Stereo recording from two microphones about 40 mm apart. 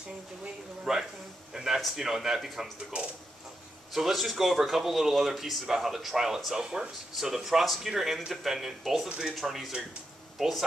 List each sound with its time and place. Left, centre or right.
0.9 s speech: centre
1.5 s speech: centre
3.9 s speech: centre
6.6 s speech: right
7.2 s speech: centre